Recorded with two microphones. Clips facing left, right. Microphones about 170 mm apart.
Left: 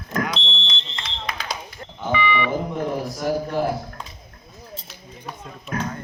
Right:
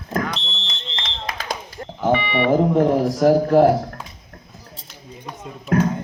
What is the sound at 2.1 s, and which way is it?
Speech, 60° right (ahead or behind).